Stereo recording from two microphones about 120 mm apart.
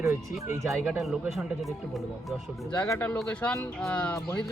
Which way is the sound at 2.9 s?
15° left (ahead or behind).